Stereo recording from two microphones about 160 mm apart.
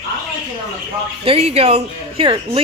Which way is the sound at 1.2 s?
40° right (ahead or behind).